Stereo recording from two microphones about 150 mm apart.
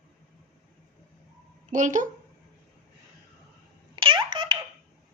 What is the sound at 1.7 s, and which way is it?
Speech, 55° right (ahead or behind).